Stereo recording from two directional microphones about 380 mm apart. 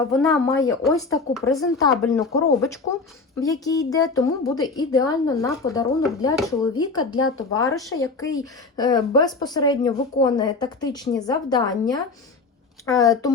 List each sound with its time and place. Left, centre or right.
0.1 s a woman's voice: centre
6.7 s a woman's voice: centre
7.2 s speech: left
7.8 s a woman's voice: centre